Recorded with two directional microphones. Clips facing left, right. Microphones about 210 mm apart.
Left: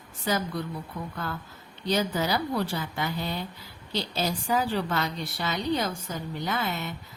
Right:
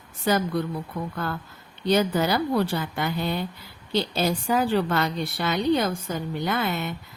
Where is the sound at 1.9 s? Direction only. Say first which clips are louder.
Right 5 dB; 60° right (ahead or behind).